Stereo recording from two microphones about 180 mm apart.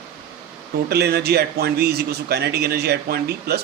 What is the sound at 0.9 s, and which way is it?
Speech, 65° right (ahead or behind).